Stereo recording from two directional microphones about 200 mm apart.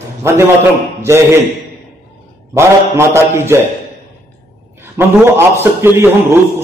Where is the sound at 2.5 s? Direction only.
15° right (ahead or behind).